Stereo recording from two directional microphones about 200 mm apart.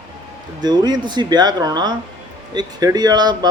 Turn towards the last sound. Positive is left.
turn(degrees=-20)  # may be behind; listen again after turning